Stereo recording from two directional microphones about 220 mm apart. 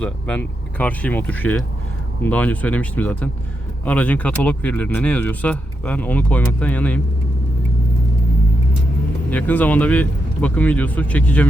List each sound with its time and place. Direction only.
0.0 s speech: 5° left (ahead or behind)
9.3 s speech: 5° left (ahead or behind)